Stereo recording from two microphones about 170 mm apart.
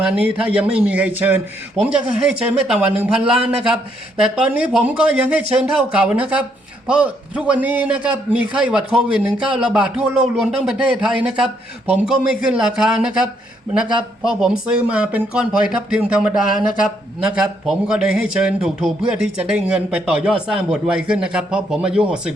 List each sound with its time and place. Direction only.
0.0 s a man's voice: 5° right (ahead or behind)